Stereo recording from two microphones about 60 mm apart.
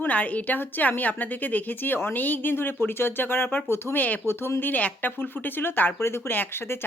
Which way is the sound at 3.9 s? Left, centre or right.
Left.